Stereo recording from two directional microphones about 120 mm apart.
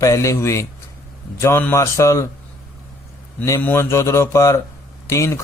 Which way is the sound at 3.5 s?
20° left (ahead or behind).